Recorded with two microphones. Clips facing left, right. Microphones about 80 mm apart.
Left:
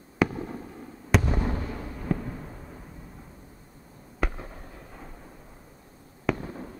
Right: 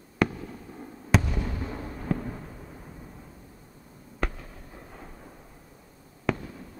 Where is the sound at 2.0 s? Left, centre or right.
Centre.